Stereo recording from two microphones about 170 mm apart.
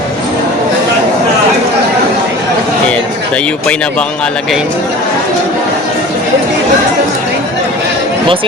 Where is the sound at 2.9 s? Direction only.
5° left (ahead or behind).